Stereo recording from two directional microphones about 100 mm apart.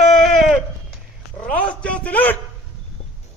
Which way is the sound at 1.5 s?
10° left (ahead or behind).